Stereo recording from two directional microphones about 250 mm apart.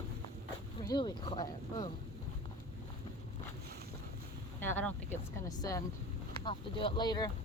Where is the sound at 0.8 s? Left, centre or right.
Centre.